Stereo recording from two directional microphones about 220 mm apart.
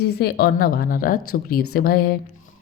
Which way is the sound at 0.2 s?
45° left (ahead or behind).